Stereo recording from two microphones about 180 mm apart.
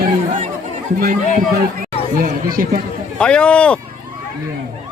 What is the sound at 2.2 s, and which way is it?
Speech, 50° right (ahead or behind).